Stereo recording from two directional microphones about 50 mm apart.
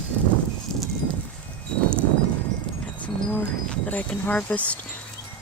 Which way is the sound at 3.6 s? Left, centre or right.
Left.